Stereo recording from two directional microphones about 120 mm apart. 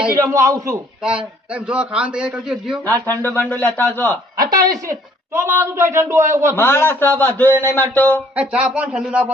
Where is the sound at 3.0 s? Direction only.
15° left (ahead or behind).